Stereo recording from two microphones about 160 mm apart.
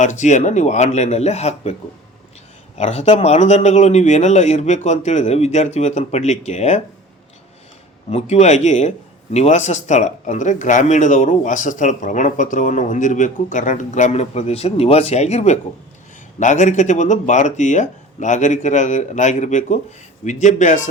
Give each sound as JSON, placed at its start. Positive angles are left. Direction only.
{"t": 0.0, "sound": "speech", "side_deg": 50}
{"t": 2.7, "sound": "speech", "side_deg": 40}
{"t": 8.1, "sound": "speech", "side_deg": 45}